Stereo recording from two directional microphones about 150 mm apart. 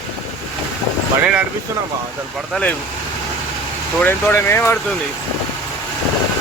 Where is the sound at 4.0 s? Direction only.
15° left (ahead or behind).